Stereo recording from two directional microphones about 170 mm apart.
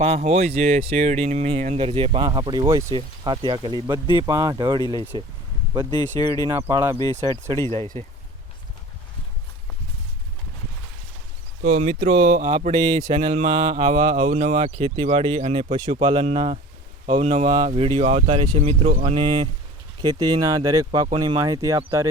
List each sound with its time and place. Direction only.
0.0 s mantra: 40° right (ahead or behind)
4.1 s speech: 20° right (ahead or behind)
5.9 s speech: 20° left (ahead or behind)
6.5 s speech: 15° right (ahead or behind)
11.6 s speech: 45° right (ahead or behind)
12.3 s mantra: 30° right (ahead or behind)
15.7 s speech: 30° right (ahead or behind)
16.2 s mantra: 35° right (ahead or behind)
17.1 s speech: 35° right (ahead or behind)
17.7 s mantra: 35° right (ahead or behind)
19.0 s speech: 30° right (ahead or behind)